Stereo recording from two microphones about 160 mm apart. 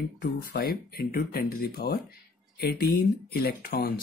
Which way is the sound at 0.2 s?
75° left (ahead or behind).